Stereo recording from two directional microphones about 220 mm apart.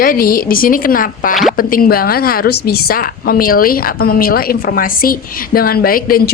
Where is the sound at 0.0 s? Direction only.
40° left (ahead or behind).